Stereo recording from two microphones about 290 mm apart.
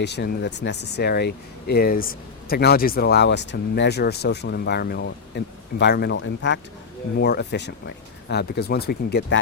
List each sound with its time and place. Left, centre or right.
0.0 s speech: left